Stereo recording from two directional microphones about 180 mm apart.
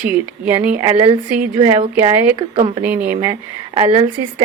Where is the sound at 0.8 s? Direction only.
30° right (ahead or behind).